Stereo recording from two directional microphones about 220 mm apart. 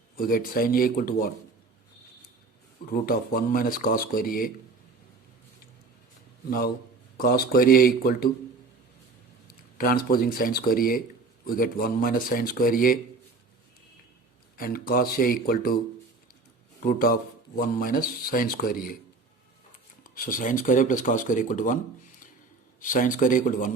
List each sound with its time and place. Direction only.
0.2 s speech: 40° left (ahead or behind)
2.9 s speech: 40° left (ahead or behind)
7.2 s speech: 45° left (ahead or behind)
9.5 s speech: 40° left (ahead or behind)
14.5 s speech: 40° left (ahead or behind)
16.8 s speech: 45° left (ahead or behind)
20.1 s speech: 40° left (ahead or behind)
22.8 s speech: 35° left (ahead or behind)